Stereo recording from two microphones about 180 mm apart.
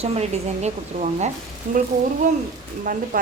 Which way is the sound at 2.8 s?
50° right (ahead or behind).